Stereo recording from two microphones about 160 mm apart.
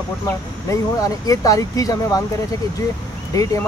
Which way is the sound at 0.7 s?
20° left (ahead or behind).